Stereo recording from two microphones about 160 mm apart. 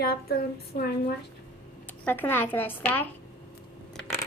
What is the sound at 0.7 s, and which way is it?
Speech, 65° left (ahead or behind).